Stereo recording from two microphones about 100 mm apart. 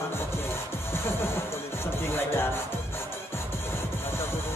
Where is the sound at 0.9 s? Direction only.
25° left (ahead or behind).